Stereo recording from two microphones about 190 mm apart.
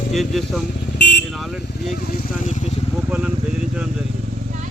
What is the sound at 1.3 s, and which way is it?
Vehicle, centre (ahead or behind).